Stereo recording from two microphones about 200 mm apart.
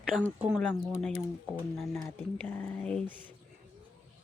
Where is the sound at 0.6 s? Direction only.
5° left (ahead or behind).